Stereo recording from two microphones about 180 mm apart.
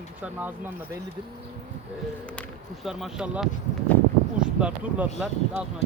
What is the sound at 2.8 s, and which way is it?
Speech, centre (ahead or behind).